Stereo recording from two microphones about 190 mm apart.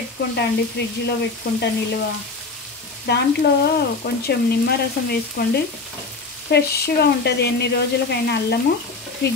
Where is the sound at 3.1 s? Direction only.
60° left (ahead or behind).